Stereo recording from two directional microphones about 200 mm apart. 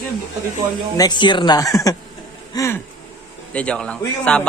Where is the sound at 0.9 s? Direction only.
20° left (ahead or behind).